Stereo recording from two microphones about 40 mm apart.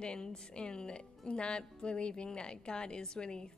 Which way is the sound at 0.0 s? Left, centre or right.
Left.